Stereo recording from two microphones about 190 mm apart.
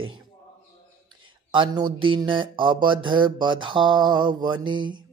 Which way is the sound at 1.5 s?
25° right (ahead or behind).